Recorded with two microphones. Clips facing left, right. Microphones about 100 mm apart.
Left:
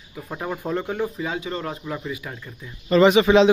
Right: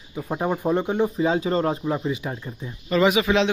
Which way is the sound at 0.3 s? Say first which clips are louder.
Right 4 dB; 20° right (ahead or behind).